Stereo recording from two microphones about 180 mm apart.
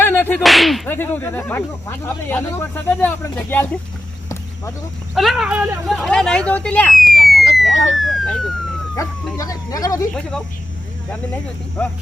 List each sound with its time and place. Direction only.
0.0 s whip: 10° left (ahead or behind)
0.4 s whip: centre (ahead or behind)
0.9 s speech: 10° left (ahead or behind)
5.1 s speech: centre (ahead or behind)
5.9 s speech: 5° left (ahead or behind)
7.2 s a sound: 60° left (ahead or behind)
7.9 s speech: centre (ahead or behind)
9.0 s speech: 20° left (ahead or behind)
11.8 s speech: 10° left (ahead or behind)